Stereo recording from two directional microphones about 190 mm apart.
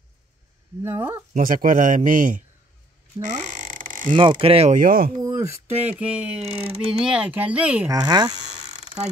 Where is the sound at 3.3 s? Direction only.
40° right (ahead or behind).